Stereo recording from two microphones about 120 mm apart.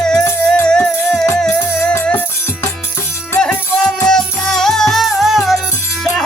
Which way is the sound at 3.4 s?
5° left (ahead or behind).